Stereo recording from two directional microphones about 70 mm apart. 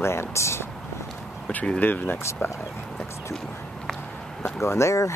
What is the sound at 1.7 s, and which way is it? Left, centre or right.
Speech, left.